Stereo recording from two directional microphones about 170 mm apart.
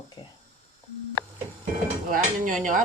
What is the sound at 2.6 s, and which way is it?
Speech, 50° right (ahead or behind).